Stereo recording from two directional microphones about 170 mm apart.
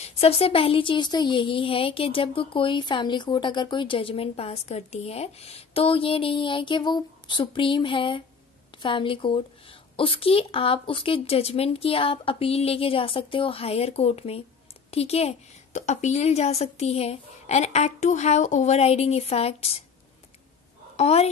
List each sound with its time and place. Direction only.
0.0 s speech: 35° left (ahead or behind)
20.9 s speech: 40° left (ahead or behind)